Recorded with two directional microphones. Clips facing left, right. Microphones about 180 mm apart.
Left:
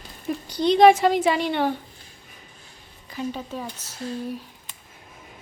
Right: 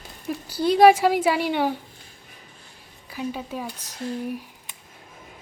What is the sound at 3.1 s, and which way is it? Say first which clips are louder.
A woman's voice: even; 10° right (ahead or behind).